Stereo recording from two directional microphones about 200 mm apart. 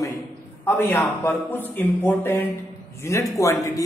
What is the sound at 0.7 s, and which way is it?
A man's voice, 10° left (ahead or behind).